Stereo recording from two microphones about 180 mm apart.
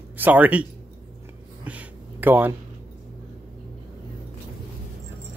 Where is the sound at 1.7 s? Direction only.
10° right (ahead or behind).